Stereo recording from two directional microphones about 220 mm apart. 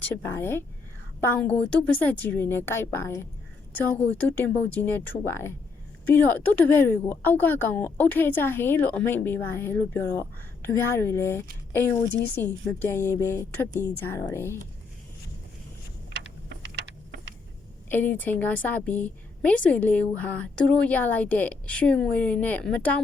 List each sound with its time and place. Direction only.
0.3 s speech: 10° left (ahead or behind)
16.1 s a sound: 55° right (ahead or behind)
17.8 s speech: 10° left (ahead or behind)